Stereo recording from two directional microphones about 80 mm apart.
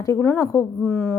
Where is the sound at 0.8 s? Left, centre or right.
Centre.